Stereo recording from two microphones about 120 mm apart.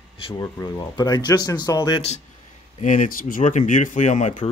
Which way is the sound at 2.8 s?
90° left.